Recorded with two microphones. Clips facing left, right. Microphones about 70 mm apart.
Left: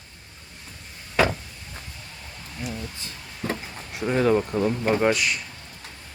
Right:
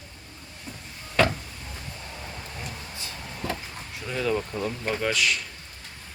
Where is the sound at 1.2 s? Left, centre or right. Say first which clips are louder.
Left 1 dB; centre.